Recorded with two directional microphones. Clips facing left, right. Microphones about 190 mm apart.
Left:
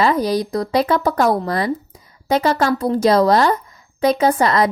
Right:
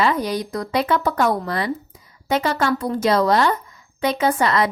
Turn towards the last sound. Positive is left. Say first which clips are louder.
# left 3 dB
turn(degrees=40)  # may be behind; listen again after turning